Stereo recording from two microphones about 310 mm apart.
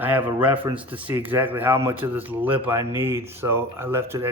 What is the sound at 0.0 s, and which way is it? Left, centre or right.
Speech, centre.